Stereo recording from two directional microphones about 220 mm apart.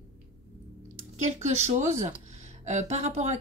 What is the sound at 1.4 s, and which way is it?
Speech, 30° right (ahead or behind).